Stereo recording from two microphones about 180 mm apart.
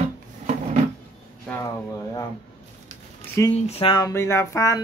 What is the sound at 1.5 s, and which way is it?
Speech, 15° left (ahead or behind).